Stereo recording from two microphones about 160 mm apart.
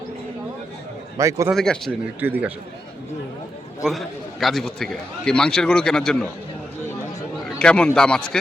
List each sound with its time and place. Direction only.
1.2 s a man's voice: 20° right (ahead or behind)
1.5 s a man's voice: 5° left (ahead or behind)
2.2 s speech: 10° right (ahead or behind)
3.8 s a man's voice: centre (ahead or behind)
7.6 s a man's voice: 5° left (ahead or behind)